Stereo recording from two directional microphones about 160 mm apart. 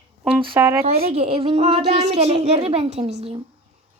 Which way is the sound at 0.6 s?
15° right (ahead or behind).